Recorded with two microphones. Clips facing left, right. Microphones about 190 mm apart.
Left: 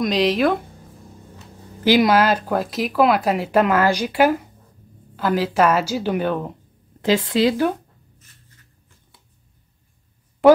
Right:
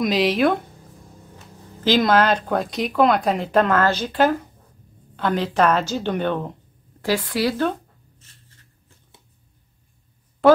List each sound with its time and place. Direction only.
0.0 s speech: centre (ahead or behind)
1.8 s speech: 10° left (ahead or behind)
7.0 s speech: 20° left (ahead or behind)
10.4 s speech: 15° left (ahead or behind)